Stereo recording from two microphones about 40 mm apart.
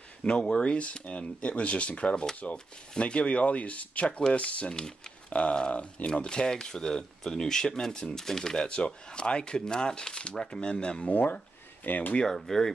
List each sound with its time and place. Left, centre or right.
0.4 s speech: left
8.6 s speech: left
11.1 s speech: left
12.3 s speech: centre